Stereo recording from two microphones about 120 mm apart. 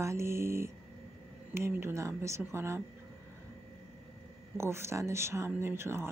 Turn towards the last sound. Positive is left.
turn(degrees=-20)  # may be behind; listen again after turning